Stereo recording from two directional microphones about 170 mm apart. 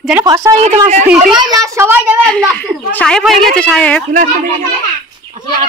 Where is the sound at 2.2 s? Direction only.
5° left (ahead or behind).